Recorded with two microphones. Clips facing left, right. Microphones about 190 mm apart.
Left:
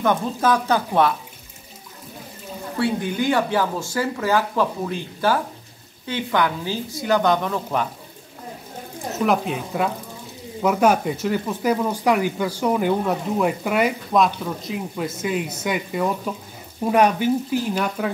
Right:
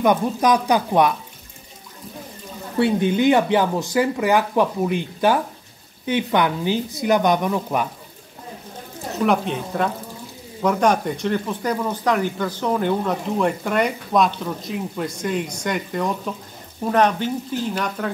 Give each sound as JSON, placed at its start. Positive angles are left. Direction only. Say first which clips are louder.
{"t": 0.0, "sound": "speech", "louder": "right 2 dB", "side_deg": -15}
{"t": 2.8, "sound": "speech", "louder": "right 5 dB", "side_deg": -20}
{"t": 9.1, "sound": "speech", "louder": "right 1 dB", "side_deg": 0}